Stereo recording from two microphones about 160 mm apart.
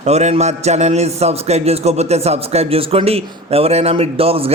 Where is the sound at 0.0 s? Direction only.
45° right (ahead or behind).